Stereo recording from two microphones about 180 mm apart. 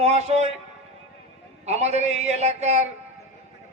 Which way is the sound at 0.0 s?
35° right (ahead or behind).